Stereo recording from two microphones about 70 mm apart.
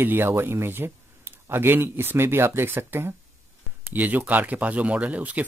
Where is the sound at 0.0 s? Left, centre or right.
Right.